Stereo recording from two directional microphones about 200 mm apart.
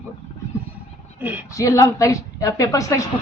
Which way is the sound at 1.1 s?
10° right (ahead or behind).